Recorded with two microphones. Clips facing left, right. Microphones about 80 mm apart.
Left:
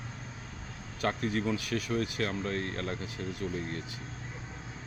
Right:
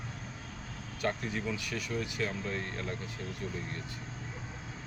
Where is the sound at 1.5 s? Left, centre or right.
Left.